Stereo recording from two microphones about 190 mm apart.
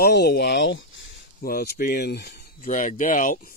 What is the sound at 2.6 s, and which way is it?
Speech, 45° left (ahead or behind).